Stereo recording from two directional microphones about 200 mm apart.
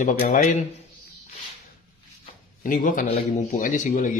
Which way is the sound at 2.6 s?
40° left (ahead or behind).